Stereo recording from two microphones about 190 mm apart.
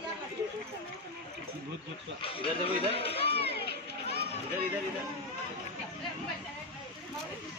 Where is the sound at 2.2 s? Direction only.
30° left (ahead or behind).